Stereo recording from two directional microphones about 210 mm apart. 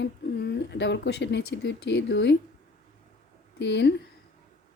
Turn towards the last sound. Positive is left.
turn(degrees=55)  # may be behind; listen again after turning